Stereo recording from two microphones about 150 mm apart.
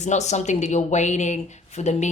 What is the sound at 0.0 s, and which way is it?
Speech, 50° left (ahead or behind).